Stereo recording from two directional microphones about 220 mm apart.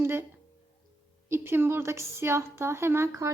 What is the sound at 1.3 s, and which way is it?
A woman's voice, 10° right (ahead or behind).